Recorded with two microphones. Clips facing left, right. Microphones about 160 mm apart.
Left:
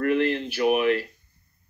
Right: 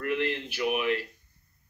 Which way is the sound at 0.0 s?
45° left (ahead or behind).